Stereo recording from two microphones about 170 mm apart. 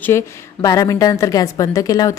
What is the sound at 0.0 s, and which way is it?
A woman's voice, 15° left (ahead or behind).